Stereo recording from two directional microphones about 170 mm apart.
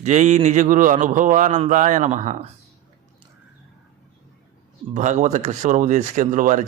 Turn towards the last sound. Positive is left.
turn(degrees=-50)  # may be behind; listen again after turning